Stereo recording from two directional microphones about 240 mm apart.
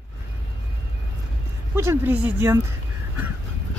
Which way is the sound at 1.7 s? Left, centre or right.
Centre.